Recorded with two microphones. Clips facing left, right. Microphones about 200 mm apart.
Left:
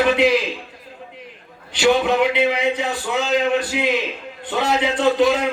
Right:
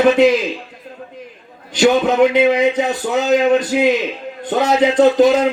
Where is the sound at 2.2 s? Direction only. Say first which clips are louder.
Right 6 dB; 45° right (ahead or behind).